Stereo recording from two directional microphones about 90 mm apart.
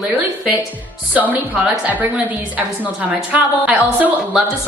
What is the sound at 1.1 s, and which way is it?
Speech, 15° right (ahead or behind).